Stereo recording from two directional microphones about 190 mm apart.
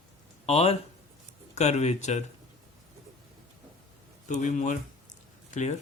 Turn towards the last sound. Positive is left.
turn(degrees=40)  # may be behind; listen again after turning